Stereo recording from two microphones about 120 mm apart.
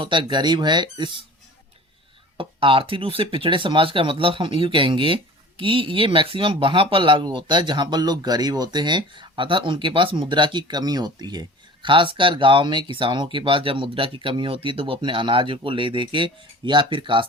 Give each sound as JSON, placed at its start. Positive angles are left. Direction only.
{"t": 0.0, "sound": "speech", "side_deg": -40}
{"t": 2.4, "sound": "speech", "side_deg": -45}